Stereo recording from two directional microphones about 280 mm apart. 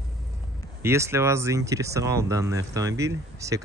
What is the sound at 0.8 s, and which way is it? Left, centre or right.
Speech, centre.